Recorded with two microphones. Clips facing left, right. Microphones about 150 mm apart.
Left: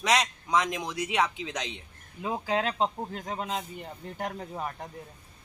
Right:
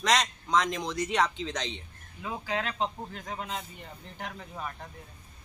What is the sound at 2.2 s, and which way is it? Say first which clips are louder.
Speech: left 4 dB; 35° left (ahead or behind).